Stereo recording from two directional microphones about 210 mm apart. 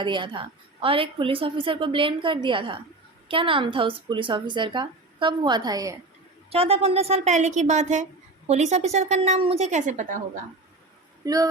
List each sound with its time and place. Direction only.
0.0 s a woman's voice: 20° right (ahead or behind)
6.5 s a woman's voice: 30° right (ahead or behind)
11.2 s a man's voice: 15° right (ahead or behind)